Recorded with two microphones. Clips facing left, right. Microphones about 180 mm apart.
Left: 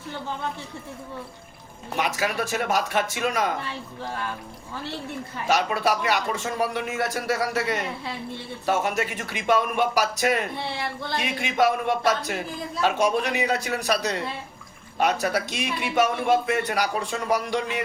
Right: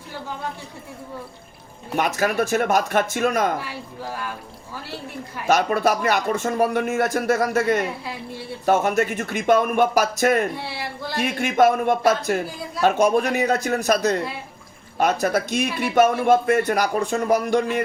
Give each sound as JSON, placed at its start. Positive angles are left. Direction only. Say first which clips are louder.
{"t": 2.0, "sound": "a man's voice", "louder": "right 5 dB", "side_deg": -50}
{"t": 5.5, "sound": "a man's voice", "louder": "right 4 dB", "side_deg": -50}